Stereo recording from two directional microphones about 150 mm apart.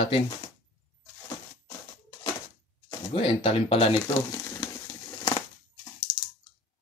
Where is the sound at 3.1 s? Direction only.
40° left (ahead or behind).